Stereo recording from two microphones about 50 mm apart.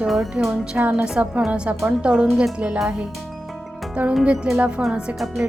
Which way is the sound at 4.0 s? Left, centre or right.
Right.